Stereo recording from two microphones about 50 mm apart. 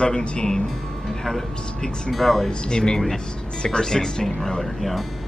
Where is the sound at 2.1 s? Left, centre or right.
Centre.